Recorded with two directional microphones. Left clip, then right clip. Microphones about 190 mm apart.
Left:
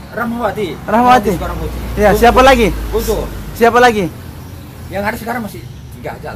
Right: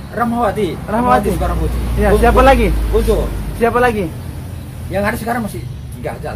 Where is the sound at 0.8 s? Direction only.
65° left (ahead or behind).